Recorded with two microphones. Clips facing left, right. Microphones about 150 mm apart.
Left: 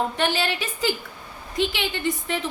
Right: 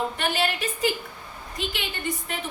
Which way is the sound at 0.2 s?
90° left.